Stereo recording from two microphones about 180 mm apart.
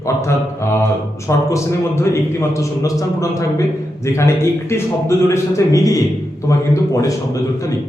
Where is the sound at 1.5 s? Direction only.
15° left (ahead or behind).